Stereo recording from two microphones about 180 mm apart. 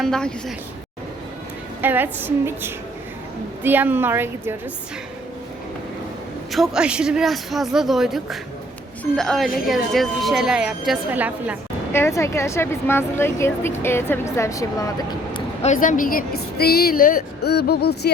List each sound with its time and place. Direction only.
0.0 s a woman's voice: 5° left (ahead or behind)
1.8 s a woman's voice: 10° right (ahead or behind)
6.5 s a woman's voice: centre (ahead or behind)
11.9 s a woman's voice: 15° left (ahead or behind)
15.6 s a woman's voice: 45° left (ahead or behind); by 18.1 s 65° left (ahead or behind)